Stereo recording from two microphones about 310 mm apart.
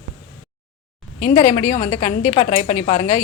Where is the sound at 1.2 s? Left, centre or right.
Left.